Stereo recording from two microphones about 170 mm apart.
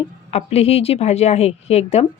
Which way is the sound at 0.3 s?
40° left (ahead or behind).